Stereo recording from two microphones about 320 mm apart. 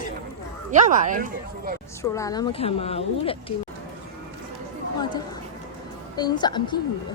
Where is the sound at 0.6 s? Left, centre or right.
Right.